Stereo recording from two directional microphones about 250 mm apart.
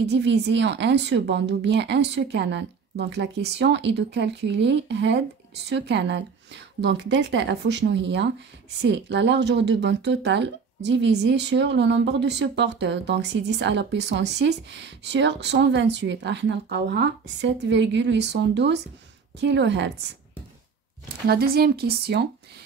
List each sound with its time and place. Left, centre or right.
0.0 s speech: right
21.3 s speech: right